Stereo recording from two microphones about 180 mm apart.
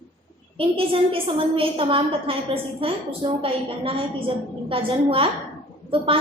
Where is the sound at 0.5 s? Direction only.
30° right (ahead or behind).